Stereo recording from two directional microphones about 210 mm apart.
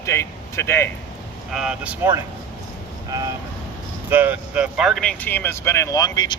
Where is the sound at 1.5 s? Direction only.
5° right (ahead or behind).